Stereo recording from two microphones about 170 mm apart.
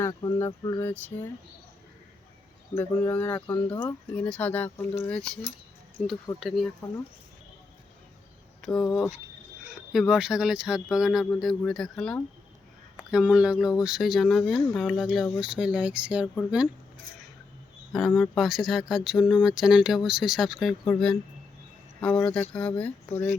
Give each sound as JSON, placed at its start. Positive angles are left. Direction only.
{"t": 0.0, "sound": "speech", "side_deg": 20}
{"t": 2.7, "sound": "speech", "side_deg": 10}
{"t": 6.4, "sound": "speech", "side_deg": 0}
{"t": 8.6, "sound": "speech", "side_deg": 0}
{"t": 17.9, "sound": "speech", "side_deg": 0}